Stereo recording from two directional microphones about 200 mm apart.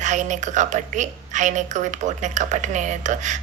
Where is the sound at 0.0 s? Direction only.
35° right (ahead or behind).